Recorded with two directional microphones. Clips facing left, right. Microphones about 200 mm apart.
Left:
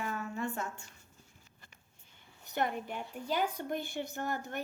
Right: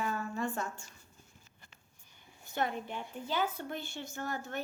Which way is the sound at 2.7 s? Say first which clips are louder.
Even; 10° left (ahead or behind).